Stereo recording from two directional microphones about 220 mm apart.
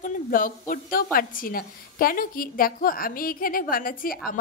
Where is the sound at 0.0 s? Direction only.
40° left (ahead or behind).